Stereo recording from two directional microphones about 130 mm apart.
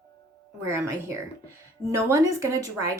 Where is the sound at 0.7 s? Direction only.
20° right (ahead or behind).